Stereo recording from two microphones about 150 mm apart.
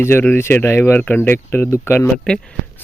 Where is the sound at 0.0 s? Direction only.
15° left (ahead or behind).